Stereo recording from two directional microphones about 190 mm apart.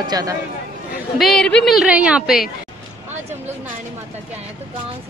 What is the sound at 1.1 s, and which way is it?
A woman's voice, centre (ahead or behind).